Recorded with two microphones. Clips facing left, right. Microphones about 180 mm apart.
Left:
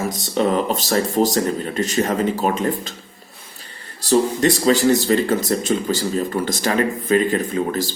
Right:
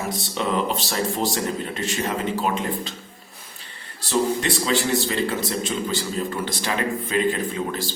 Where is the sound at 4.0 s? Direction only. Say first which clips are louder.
Left 5 dB; 40° left (ahead or behind).